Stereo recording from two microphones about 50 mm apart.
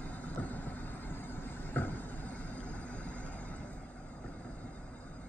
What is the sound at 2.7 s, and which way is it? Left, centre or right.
Vehicle, left.